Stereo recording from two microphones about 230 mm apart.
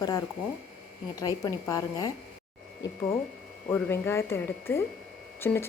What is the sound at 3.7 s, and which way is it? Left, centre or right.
A woman's voice, centre.